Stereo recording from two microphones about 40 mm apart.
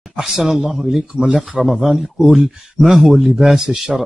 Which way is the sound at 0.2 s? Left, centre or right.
Centre.